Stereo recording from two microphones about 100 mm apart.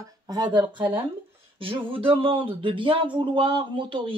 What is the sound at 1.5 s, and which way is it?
Speech, 60° right (ahead or behind).